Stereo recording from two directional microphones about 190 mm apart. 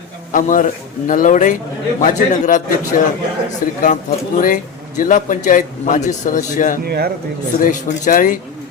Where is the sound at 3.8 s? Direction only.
40° left (ahead or behind).